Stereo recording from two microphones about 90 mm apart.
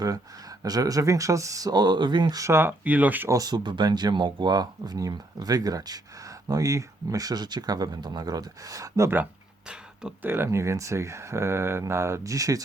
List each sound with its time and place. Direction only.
0.6 s speech: 45° right (ahead or behind)
2.5 s speech: 25° right (ahead or behind)
3.2 s speech: 45° right (ahead or behind)
9.6 s a sound: 10° right (ahead or behind)
10.2 s speech: 25° right (ahead or behind)